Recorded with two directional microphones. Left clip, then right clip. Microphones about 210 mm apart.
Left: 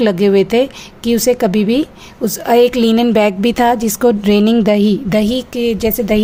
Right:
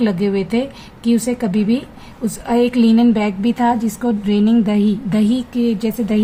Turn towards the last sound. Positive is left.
turn(degrees=45)  # may be behind; listen again after turning